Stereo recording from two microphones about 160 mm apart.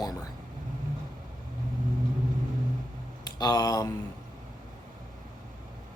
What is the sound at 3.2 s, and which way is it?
Speech, 25° left (ahead or behind).